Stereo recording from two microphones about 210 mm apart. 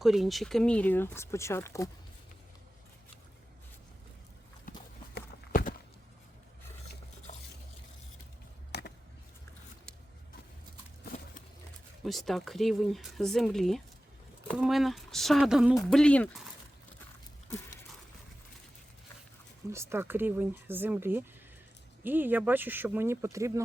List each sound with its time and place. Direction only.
0.0 s speech: centre (ahead or behind); by 1.9 s 15° left (ahead or behind)
5.1 s clip-clop: 40° left (ahead or behind)
7.3 s stir: 35° left (ahead or behind)
8.7 s a sound: 55° left (ahead or behind)
11.0 s a sound: 40° left (ahead or behind)
12.0 s speech: centre (ahead or behind)
19.7 s speech: 10° right (ahead or behind)